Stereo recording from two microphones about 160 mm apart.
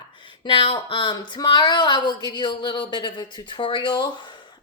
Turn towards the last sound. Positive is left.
turn(degrees=30)  # may be behind; listen again after turning